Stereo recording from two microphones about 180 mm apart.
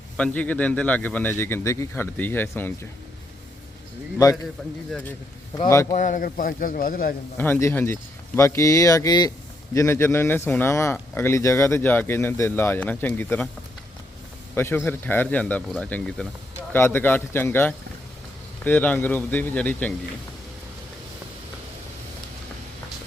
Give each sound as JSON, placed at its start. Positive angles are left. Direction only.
{"t": 0.2, "sound": "speech", "side_deg": 10}
{"t": 4.9, "sound": "speech", "side_deg": 5}
{"t": 5.9, "sound": "a man's voice", "side_deg": 45}
{"t": 7.3, "sound": "speech", "side_deg": 10}
{"t": 14.5, "sound": "speech", "side_deg": 15}